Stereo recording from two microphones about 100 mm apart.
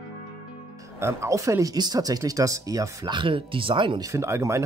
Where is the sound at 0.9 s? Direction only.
25° right (ahead or behind).